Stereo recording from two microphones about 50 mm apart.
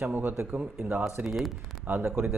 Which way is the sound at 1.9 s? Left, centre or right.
Right.